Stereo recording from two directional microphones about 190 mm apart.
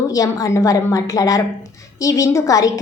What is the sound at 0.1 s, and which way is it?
A woman's voice, 20° left (ahead or behind).